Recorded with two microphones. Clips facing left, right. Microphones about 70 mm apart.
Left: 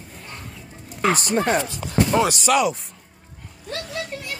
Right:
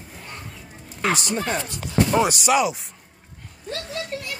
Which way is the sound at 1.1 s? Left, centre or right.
Left.